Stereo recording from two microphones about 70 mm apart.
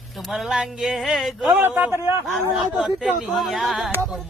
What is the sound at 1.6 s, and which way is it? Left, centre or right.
Speech, right.